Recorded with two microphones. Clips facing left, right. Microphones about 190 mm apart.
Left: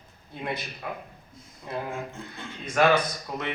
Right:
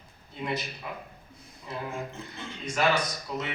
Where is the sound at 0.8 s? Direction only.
55° left (ahead or behind).